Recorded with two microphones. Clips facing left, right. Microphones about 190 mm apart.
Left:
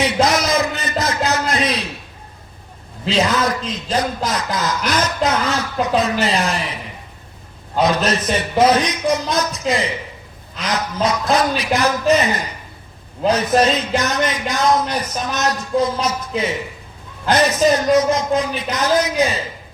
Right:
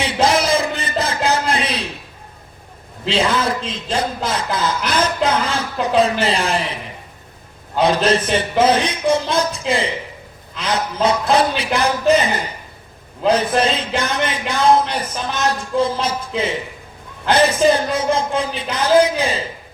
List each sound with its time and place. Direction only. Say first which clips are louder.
0.0 s a sound: even; 30° right (ahead or behind)
3.1 s speech: even; 30° right (ahead or behind)
7.8 s a man's voice: right 2 dB; 30° right (ahead or behind)